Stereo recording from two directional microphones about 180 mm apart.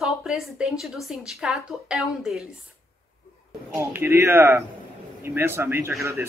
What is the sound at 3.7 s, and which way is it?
Speech, 15° right (ahead or behind).